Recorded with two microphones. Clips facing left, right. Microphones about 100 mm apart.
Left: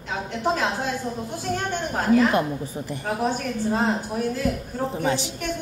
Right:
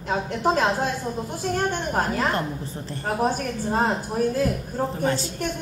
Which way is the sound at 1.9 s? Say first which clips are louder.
Left 6 dB; 45° right (ahead or behind).